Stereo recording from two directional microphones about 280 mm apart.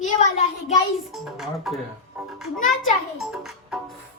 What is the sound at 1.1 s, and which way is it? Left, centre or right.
Speech, centre.